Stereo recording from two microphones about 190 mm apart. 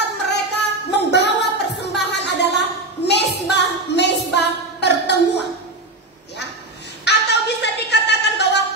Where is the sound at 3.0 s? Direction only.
60° left (ahead or behind).